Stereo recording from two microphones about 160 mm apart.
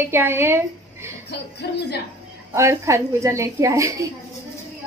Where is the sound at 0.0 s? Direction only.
15° right (ahead or behind).